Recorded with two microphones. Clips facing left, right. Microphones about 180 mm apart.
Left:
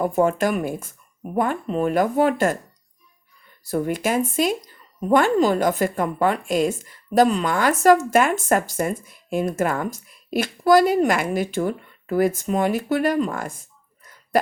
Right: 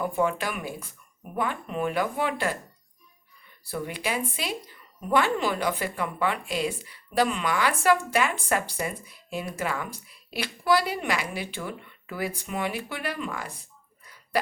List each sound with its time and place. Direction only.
0.0 s a woman's voice: 45° left (ahead or behind)
3.6 s a woman's voice: 45° left (ahead or behind)